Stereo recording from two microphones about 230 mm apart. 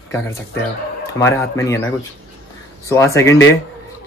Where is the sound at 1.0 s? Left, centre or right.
Centre.